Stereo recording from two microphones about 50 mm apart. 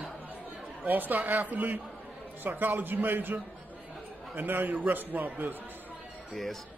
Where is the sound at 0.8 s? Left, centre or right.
Right.